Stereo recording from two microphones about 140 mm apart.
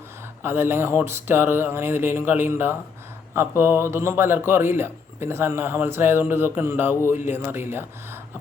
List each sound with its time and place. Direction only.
0.4 s a man's voice: 15° right (ahead or behind)